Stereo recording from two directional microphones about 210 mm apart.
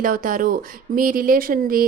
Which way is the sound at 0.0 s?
40° right (ahead or behind).